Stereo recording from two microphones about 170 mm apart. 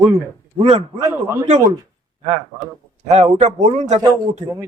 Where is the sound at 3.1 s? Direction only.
40° right (ahead or behind).